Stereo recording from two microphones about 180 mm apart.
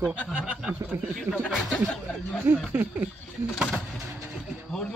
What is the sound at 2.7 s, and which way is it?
Speech, 10° right (ahead or behind).